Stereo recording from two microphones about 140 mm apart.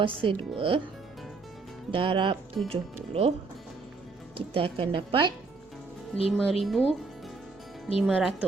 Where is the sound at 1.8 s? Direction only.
40° right (ahead or behind).